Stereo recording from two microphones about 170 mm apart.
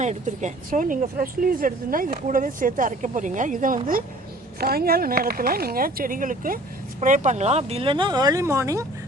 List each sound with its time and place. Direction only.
0.0 s speech: 45° right (ahead or behind)
4.6 s speech: 65° right (ahead or behind); by 8.9 s 20° right (ahead or behind)